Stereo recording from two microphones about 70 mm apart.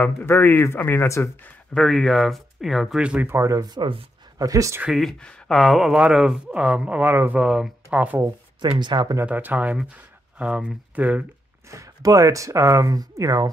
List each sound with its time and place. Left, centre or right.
0.0 s speech: left
1.7 s speech: centre
3.0 s speech: centre
3.3 s speech: right
5.2 s a sound: centre
5.6 s speech: centre; by 7.3 s right
7.3 s speech: centre
8.5 s speech: right
9.2 s speech: right
11.7 s speech: right